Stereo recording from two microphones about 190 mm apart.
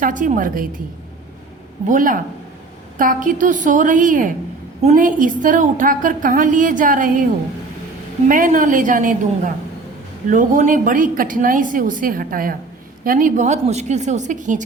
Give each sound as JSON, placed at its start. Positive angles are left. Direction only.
{"t": 0.0, "sound": "a woman's voice", "side_deg": -45}
{"t": 1.9, "sound": "a woman's voice", "side_deg": -45}
{"t": 8.3, "sound": "a woman's voice", "side_deg": -45}